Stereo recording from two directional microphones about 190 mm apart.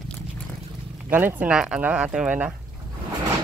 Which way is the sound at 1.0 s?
10° right (ahead or behind).